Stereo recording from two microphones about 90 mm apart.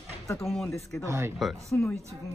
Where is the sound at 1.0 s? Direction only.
35° right (ahead or behind).